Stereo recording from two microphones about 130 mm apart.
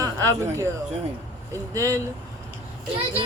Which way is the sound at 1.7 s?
25° right (ahead or behind).